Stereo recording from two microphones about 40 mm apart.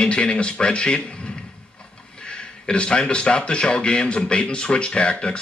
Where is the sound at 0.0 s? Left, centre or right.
Left.